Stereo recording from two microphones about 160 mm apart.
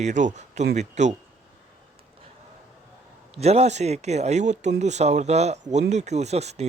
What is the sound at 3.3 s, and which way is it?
Speech, 40° right (ahead or behind).